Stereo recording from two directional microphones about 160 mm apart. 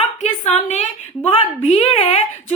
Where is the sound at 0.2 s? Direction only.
45° left (ahead or behind).